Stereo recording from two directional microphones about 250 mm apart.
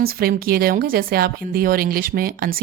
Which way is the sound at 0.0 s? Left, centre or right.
Right.